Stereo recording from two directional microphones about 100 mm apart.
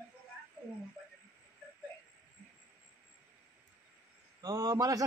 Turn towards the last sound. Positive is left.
turn(degrees=-35)  # may be behind; listen again after turning